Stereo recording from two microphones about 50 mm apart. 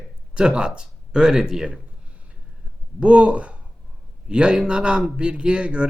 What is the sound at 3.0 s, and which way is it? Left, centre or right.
A man's voice, right.